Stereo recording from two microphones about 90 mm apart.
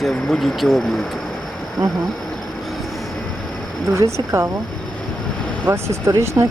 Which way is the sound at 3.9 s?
30° right (ahead or behind).